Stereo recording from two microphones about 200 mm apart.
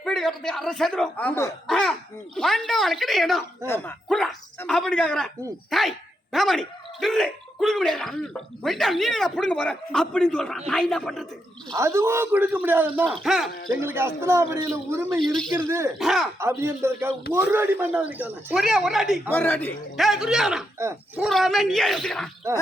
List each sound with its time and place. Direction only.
0.0 s speech: 5° left (ahead or behind)
11.7 s speech: 15° right (ahead or behind)
13.5 s speech: 45° left (ahead or behind)
13.8 s speech: 10° right (ahead or behind)
15.2 s speech: 5° left (ahead or behind)
16.4 s speech: 15° right (ahead or behind)
19.3 s a man's voice: 10° left (ahead or behind)
20.1 s speech: centre (ahead or behind)